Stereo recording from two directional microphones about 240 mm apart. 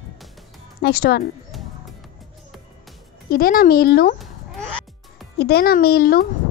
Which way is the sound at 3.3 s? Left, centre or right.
Left.